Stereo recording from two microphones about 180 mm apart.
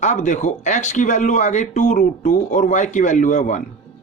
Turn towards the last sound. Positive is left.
turn(degrees=45)  # may be behind; listen again after turning